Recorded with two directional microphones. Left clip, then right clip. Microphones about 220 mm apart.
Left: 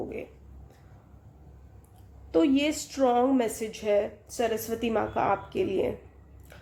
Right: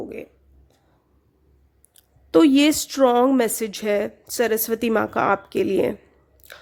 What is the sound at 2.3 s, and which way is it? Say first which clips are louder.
A woman's voice: right 9 dB; 50° right (ahead or behind).